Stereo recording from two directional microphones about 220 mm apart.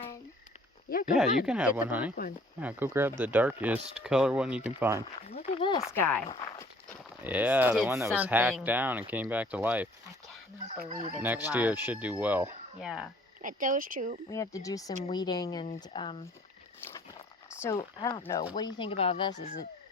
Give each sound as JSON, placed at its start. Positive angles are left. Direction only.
{"t": 0.9, "sound": "speech", "side_deg": 40}
{"t": 1.5, "sound": "speech", "side_deg": -5}
{"t": 5.3, "sound": "speech", "side_deg": 25}
{"t": 7.3, "sound": "speech", "side_deg": -5}
{"t": 10.7, "sound": "speech", "side_deg": -35}
{"t": 11.1, "sound": "speech", "side_deg": -10}
{"t": 13.4, "sound": "speech", "side_deg": -35}
{"t": 14.3, "sound": "speech", "side_deg": 15}
{"t": 17.6, "sound": "speech", "side_deg": 15}